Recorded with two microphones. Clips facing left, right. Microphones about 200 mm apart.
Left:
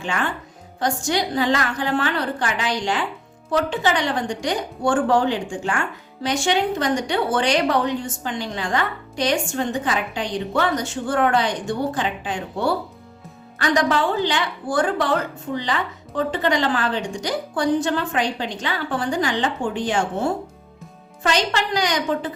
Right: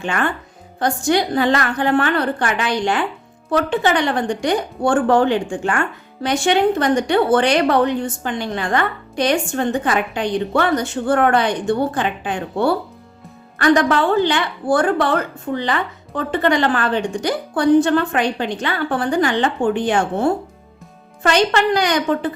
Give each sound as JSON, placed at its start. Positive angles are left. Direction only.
{"t": 0.0, "sound": "a woman's voice", "side_deg": -60}